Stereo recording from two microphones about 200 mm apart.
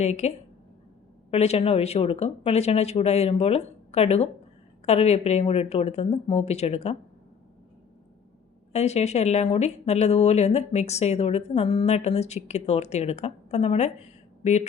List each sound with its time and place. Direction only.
0.0 s speech: 35° left (ahead or behind)
8.7 s speech: 35° left (ahead or behind)